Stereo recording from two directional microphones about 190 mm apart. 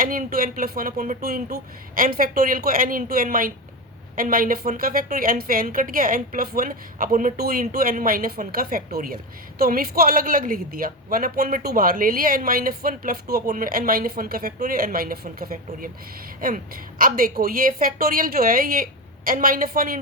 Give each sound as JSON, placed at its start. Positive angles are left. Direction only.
{"t": 0.0, "sound": "a woman's voice", "side_deg": -45}